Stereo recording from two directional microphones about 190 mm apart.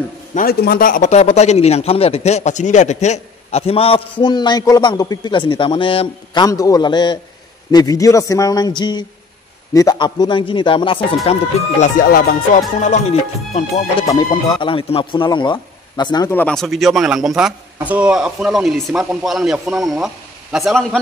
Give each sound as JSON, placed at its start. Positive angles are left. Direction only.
{"t": 0.3, "sound": "a man's voice", "side_deg": 50}
{"t": 11.8, "sound": "speech", "side_deg": 50}
{"t": 14.0, "sound": "a man's voice", "side_deg": 20}
{"t": 16.3, "sound": "speech", "side_deg": 10}